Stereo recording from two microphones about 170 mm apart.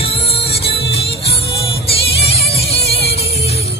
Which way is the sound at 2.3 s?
35° left (ahead or behind).